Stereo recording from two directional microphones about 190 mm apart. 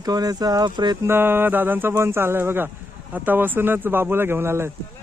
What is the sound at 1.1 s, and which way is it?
Speech, 10° right (ahead or behind).